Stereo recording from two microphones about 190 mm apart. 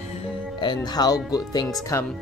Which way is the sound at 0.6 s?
20° left (ahead or behind).